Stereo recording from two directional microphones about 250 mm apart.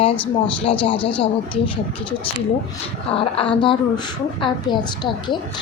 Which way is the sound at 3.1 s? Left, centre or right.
Left.